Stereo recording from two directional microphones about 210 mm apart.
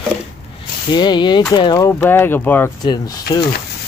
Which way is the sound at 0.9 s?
20° left (ahead or behind).